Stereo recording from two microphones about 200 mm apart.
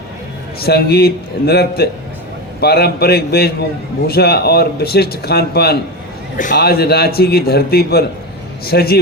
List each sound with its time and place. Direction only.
0.6 s speech: 50° left (ahead or behind)